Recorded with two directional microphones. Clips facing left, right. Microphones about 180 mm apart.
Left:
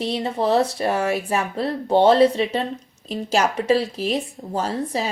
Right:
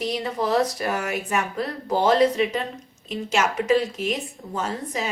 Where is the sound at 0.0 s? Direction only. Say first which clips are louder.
Left 3 dB; 30° left (ahead or behind).